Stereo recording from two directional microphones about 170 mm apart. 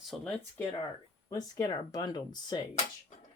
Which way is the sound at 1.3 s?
20° left (ahead or behind).